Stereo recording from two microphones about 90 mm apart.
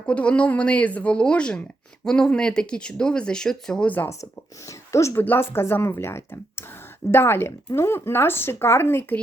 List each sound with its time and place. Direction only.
0.1 s speech: 15° left (ahead or behind)
4.1 s speech: 35° left (ahead or behind)